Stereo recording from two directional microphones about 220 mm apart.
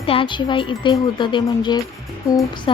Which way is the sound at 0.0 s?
25° left (ahead or behind).